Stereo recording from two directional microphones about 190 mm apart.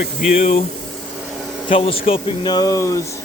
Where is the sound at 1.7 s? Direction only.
30° left (ahead or behind).